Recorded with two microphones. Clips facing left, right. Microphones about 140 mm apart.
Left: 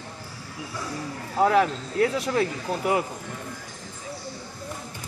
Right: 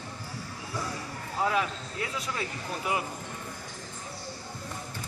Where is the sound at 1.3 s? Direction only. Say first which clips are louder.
Left 8 dB; 55° left (ahead or behind).